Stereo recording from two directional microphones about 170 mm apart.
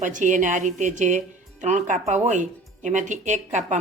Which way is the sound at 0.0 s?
50° right (ahead or behind).